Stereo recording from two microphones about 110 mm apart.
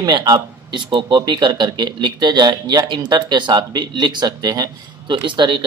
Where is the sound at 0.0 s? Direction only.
35° right (ahead or behind).